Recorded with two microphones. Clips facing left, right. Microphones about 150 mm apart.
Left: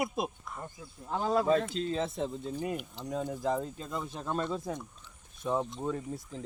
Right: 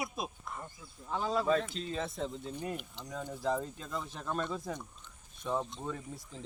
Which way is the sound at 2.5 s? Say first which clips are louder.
Left 4 dB; 5° left (ahead or behind).